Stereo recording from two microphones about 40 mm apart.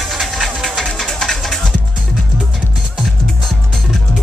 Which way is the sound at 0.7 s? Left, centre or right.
Centre.